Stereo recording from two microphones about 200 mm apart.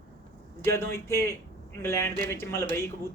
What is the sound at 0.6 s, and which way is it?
A man's voice, 15° left (ahead or behind).